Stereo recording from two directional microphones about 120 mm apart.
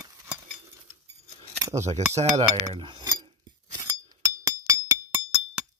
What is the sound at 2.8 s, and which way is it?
Cutlery, 40° right (ahead or behind).